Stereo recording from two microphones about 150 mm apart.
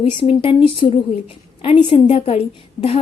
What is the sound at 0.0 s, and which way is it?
A woman's voice, 40° left (ahead or behind).